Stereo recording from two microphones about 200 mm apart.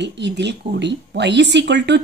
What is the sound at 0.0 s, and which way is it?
Speech, 60° right (ahead or behind).